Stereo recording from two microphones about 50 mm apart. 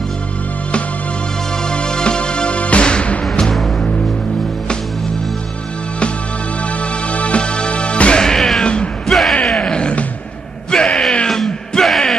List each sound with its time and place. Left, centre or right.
1.6 s music: centre
6.8 s music: left; by 8.6 s centre
8.6 s bellow: centre
9.1 s bellow: centre
9.4 s a sound: centre
10.7 s bellow: centre